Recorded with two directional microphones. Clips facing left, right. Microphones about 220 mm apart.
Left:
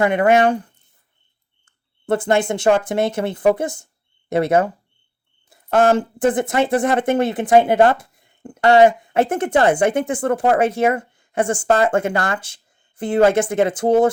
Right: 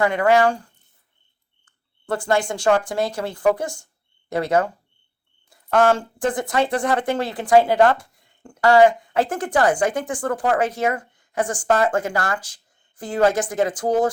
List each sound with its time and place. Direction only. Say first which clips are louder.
0.0 s a woman's voice: left 2 dB; 20° left (ahead or behind)